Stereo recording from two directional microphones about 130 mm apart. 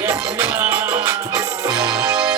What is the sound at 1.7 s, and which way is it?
Music, 30° right (ahead or behind).